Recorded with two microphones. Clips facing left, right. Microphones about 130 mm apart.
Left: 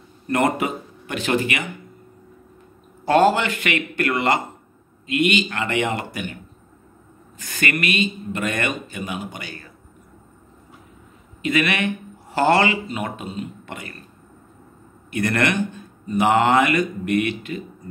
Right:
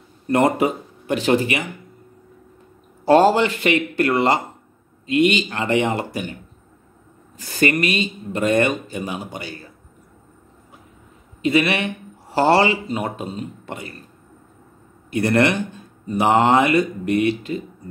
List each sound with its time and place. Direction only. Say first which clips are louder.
0.3 s speech: right 3 dB; 30° right (ahead or behind)
3.1 s speech: right 3 dB; 35° right (ahead or behind)
7.3 s speech: right 5 dB; 35° right (ahead or behind)
11.4 s speech: right 2 dB; 30° right (ahead or behind)
15.0 s speech: right 4 dB; 30° right (ahead or behind)